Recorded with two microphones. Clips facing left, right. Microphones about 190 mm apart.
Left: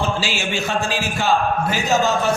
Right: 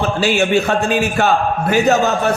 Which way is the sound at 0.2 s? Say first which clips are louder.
Right 9 dB; 55° right (ahead or behind).